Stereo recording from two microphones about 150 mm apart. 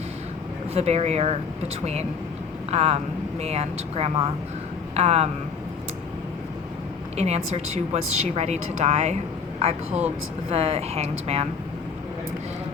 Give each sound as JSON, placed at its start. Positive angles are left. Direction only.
{"t": 0.7, "sound": "speech", "side_deg": -45}
{"t": 7.2, "sound": "speech", "side_deg": -45}